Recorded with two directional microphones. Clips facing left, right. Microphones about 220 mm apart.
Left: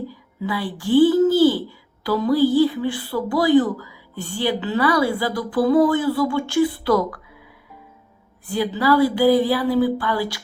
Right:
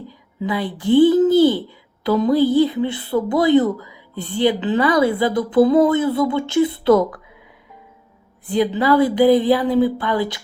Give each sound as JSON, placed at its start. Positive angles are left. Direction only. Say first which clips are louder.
{"t": 0.1, "sound": "a child's voice", "louder": "right 3 dB", "side_deg": -20}
{"t": 8.4, "sound": "a woman's voice", "louder": "right 3 dB", "side_deg": -20}